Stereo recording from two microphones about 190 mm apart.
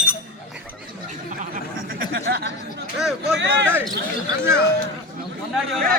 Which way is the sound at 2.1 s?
55° right (ahead or behind).